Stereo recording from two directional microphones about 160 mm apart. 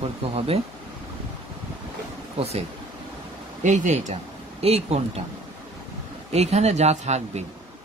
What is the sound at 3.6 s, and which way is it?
Speech, 45° right (ahead or behind).